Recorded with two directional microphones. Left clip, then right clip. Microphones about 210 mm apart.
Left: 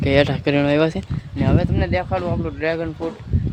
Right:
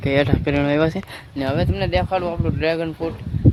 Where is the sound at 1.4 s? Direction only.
15° right (ahead or behind).